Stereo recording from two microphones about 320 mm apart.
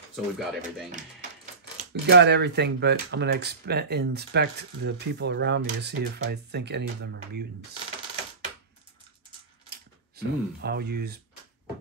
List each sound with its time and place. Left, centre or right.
0.1 s speech: centre
0.9 s speech: right
9.7 s speech: right